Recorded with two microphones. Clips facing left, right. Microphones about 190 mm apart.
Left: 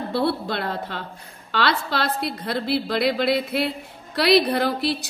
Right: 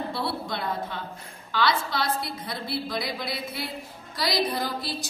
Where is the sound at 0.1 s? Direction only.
65° left (ahead or behind).